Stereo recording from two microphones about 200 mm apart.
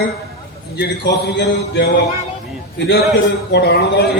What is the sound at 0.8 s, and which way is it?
A man's voice, 60° left (ahead or behind).